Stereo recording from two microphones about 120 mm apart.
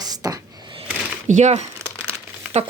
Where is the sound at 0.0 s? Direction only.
30° right (ahead or behind).